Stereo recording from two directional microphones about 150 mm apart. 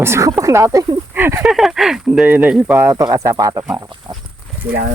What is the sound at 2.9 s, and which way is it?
Speech, 20° right (ahead or behind).